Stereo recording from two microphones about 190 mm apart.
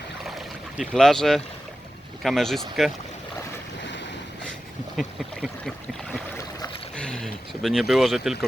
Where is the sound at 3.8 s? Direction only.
70° left (ahead or behind).